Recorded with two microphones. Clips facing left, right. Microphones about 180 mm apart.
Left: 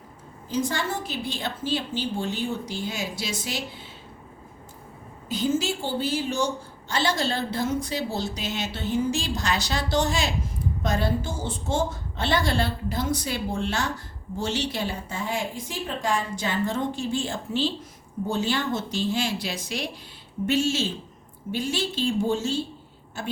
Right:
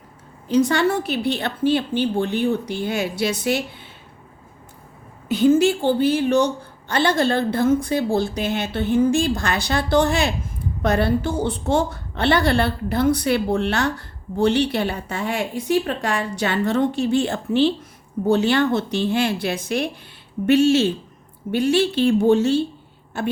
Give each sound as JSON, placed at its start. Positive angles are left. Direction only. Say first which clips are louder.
{"t": 0.4, "sound": "a woman's voice", "louder": "right 9 dB", "side_deg": -70}
{"t": 5.3, "sound": "a woman's voice", "louder": "right 10 dB", "side_deg": -60}